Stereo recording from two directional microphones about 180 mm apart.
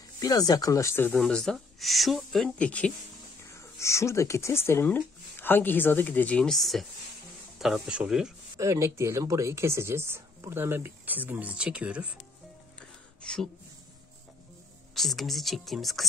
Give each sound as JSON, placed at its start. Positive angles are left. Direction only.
{"t": 0.2, "sound": "speech", "side_deg": 20}
{"t": 8.5, "sound": "speech", "side_deg": -15}
{"t": 13.2, "sound": "speech", "side_deg": 5}
{"t": 15.0, "sound": "speech", "side_deg": 0}